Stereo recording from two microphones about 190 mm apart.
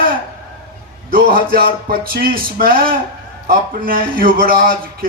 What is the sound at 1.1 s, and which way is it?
A man's voice, 50° right (ahead or behind).